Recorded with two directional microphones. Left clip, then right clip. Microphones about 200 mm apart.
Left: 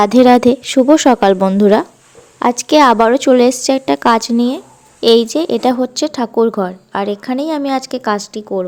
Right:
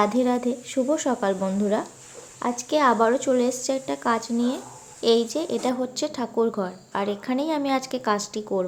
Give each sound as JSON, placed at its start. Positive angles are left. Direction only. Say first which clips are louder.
{"t": 0.0, "sound": "speech", "louder": "left 14 dB", "side_deg": 50}